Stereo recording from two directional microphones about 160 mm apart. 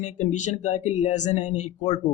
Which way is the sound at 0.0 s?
45° left (ahead or behind).